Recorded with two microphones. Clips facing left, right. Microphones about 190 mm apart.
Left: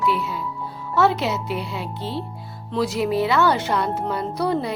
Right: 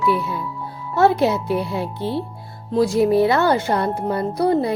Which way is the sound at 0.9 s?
50° right (ahead or behind).